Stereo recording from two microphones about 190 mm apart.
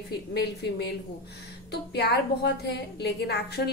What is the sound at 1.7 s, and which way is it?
A woman's voice, 60° left (ahead or behind).